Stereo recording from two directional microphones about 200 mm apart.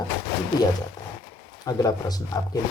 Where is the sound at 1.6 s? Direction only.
20° left (ahead or behind).